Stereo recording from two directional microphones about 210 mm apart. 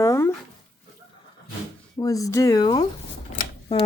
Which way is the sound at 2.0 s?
15° left (ahead or behind).